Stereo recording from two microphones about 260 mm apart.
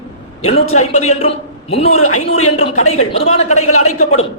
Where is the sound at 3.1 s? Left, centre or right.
Left.